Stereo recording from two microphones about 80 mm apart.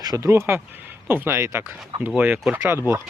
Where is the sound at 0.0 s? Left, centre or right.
Right.